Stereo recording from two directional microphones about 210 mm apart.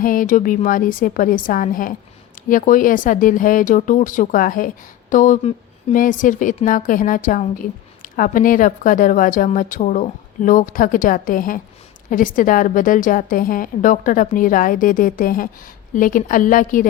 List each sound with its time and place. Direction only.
0.0 s speech: 40° left (ahead or behind)